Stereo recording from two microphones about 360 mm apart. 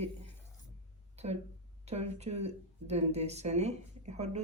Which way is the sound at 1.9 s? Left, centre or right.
Centre.